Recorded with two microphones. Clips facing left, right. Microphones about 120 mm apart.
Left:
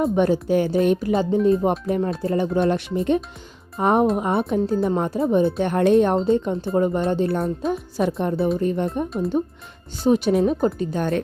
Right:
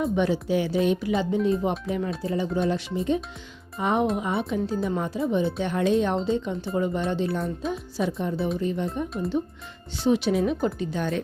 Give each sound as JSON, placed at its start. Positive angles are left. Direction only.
{"t": 0.0, "sound": "speech", "side_deg": 50}
{"t": 2.2, "sound": "speech", "side_deg": 55}
{"t": 3.8, "sound": "speech", "side_deg": 50}
{"t": 10.4, "sound": "speech", "side_deg": 35}
{"t": 10.8, "sound": "speech", "side_deg": 50}